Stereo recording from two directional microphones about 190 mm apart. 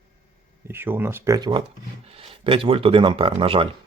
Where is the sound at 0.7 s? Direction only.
10° right (ahead or behind); by 3.7 s 30° right (ahead or behind).